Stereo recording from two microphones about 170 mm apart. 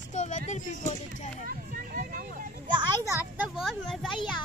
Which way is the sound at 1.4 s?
60° right (ahead or behind).